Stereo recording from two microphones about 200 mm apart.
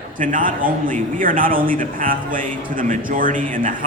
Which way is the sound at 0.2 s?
40° right (ahead or behind).